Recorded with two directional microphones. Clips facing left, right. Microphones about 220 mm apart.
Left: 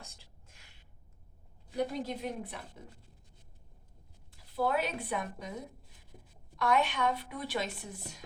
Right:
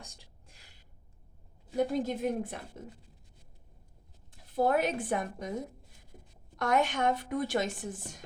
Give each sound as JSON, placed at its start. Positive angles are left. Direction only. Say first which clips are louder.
{"t": 0.4, "sound": "a sound", "louder": "right 2 dB", "side_deg": -35}
{"t": 1.7, "sound": "a woman's voice", "louder": "right 4 dB", "side_deg": -50}
{"t": 4.5, "sound": "a woman's voice", "louder": "right 4 dB", "side_deg": -45}